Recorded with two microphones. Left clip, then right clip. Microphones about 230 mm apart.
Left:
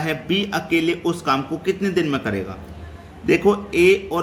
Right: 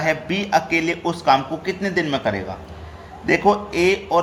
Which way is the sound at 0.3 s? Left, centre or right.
Centre.